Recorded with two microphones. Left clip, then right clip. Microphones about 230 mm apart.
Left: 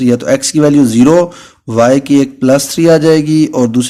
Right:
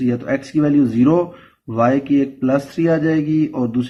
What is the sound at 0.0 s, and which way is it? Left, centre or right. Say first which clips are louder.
Speech: left 10 dB; left.